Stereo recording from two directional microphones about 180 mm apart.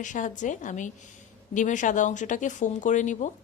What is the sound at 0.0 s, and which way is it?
A woman's voice, 45° left (ahead or behind).